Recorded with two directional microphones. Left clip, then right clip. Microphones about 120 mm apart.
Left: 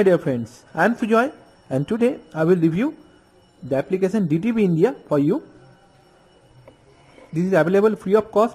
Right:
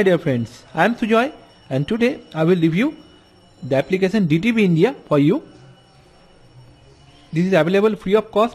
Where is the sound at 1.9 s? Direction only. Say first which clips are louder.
Right 1 dB; 10° left (ahead or behind).